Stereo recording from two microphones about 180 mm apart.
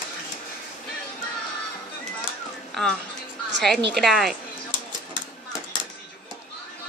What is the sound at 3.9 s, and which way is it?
Speech, centre (ahead or behind).